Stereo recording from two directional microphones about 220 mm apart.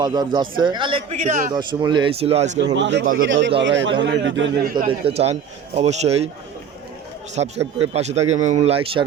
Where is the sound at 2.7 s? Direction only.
55° right (ahead or behind).